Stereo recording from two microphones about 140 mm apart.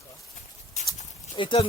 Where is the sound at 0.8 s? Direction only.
55° left (ahead or behind).